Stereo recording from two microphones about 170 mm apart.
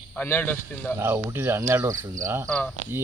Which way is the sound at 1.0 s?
15° right (ahead or behind).